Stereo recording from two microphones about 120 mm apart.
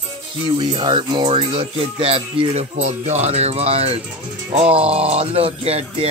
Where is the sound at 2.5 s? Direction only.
70° right (ahead or behind).